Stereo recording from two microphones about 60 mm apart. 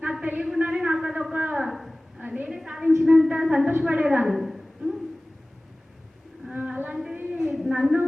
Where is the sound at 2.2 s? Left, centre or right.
Right.